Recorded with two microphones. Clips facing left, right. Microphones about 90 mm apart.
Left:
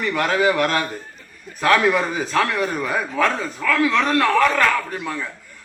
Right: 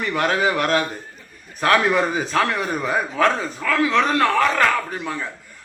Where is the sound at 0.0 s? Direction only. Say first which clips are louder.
Even; 30° right (ahead or behind).